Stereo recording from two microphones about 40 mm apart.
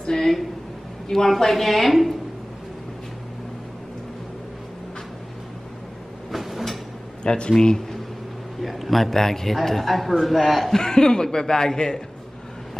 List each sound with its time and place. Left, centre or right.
0.0 s a sound: centre
1.0 s a man's voice: centre
6.3 s a sound: centre
7.2 s speech: left
8.6 s a man's voice: centre
10.8 s speech: centre